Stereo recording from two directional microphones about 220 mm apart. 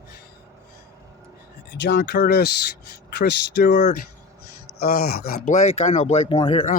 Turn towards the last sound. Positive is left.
turn(degrees=30)  # may be behind; listen again after turning